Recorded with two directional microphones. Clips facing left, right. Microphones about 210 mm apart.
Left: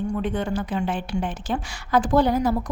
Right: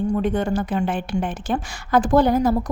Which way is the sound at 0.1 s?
40° right (ahead or behind).